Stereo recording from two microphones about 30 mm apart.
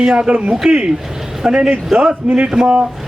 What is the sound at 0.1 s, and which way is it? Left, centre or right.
Speech, right.